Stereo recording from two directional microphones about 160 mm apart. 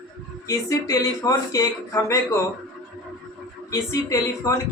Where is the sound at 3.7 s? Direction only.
20° left (ahead or behind).